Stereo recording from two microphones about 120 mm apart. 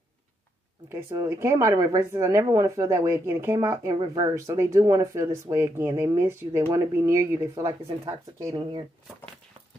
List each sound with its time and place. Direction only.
0.8 s speech: 25° right (ahead or behind)